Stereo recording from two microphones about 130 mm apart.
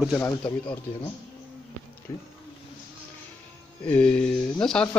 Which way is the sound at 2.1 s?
30° left (ahead or behind).